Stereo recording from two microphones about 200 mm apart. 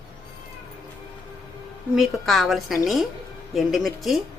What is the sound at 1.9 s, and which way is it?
A woman's voice, centre (ahead or behind).